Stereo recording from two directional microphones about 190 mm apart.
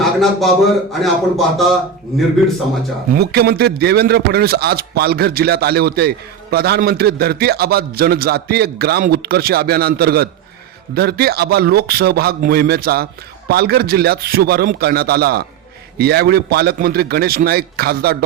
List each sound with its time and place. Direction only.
0.0 s a man's voice: centre (ahead or behind)
3.1 s a man's voice: 55° right (ahead or behind)